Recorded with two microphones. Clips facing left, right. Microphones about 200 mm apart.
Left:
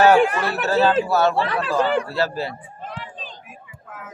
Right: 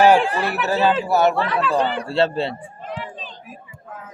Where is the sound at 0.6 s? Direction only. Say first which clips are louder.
Left 2 dB; 15° right (ahead or behind).